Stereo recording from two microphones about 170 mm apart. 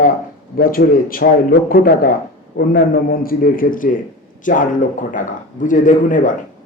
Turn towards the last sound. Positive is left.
turn(degrees=50)  # may be behind; listen again after turning